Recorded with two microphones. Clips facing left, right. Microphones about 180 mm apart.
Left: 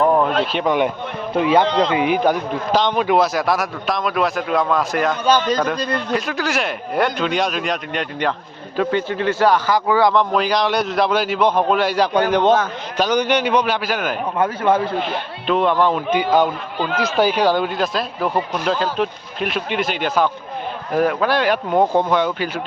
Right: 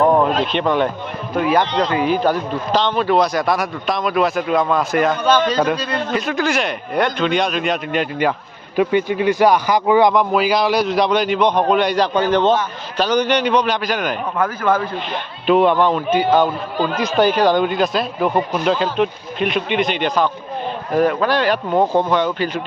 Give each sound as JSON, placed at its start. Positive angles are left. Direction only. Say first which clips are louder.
{"t": 0.5, "sound": "speech", "louder": "right 1 dB", "side_deg": 10}
{"t": 1.3, "sound": "a man's voice", "louder": "left 1 dB", "side_deg": 25}
{"t": 6.1, "sound": "a man's voice", "louder": "right 5 dB", "side_deg": 0}
{"t": 10.3, "sound": "speech", "louder": "right 2 dB", "side_deg": -5}
{"t": 14.3, "sound": "speech", "louder": "left 1 dB", "side_deg": 30}
{"t": 15.4, "sound": "speech", "louder": "right 3 dB", "side_deg": -5}